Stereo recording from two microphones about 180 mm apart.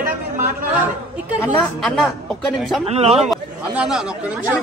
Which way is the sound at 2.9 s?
35° right (ahead or behind).